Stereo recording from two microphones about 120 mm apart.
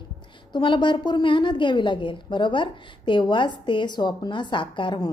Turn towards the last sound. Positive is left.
turn(degrees=40)  # may be behind; listen again after turning